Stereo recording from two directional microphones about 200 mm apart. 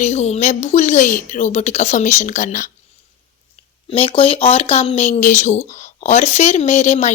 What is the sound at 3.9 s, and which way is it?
A woman's voice, 30° left (ahead or behind).